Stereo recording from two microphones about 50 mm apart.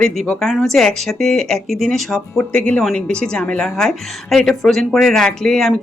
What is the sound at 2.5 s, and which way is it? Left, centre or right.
Speech, left.